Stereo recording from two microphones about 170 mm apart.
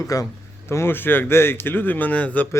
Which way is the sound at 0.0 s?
20° left (ahead or behind).